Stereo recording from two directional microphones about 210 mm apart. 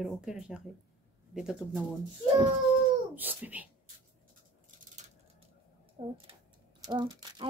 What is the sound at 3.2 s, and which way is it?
Speech, 10° right (ahead or behind).